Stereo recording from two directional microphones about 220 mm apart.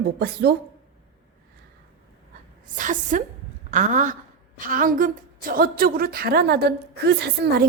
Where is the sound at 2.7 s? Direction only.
35° right (ahead or behind).